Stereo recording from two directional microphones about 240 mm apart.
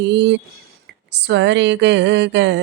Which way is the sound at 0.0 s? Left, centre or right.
Right.